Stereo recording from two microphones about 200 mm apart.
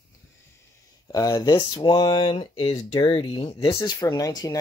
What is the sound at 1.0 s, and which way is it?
Speech, 15° left (ahead or behind).